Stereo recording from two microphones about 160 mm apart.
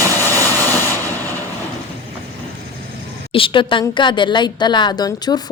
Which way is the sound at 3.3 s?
30° left (ahead or behind).